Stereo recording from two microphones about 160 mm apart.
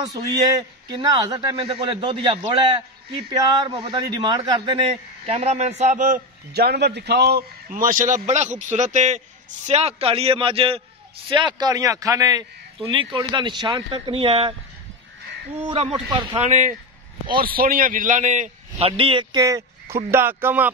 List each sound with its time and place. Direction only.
0.6 s a man's voice: 25° right (ahead or behind)
15.7 s a man's voice: 40° right (ahead or behind)
17.3 s a man's voice: 65° right (ahead or behind); by 19.4 s 35° right (ahead or behind)
19.4 s speech: 20° right (ahead or behind)